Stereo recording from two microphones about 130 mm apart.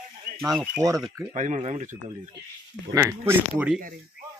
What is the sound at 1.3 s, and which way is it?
Speech, 65° right (ahead or behind).